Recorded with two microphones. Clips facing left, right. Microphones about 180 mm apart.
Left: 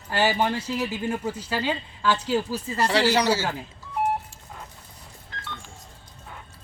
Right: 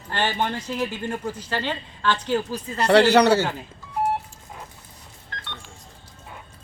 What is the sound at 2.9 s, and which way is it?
Speech, 60° right (ahead or behind).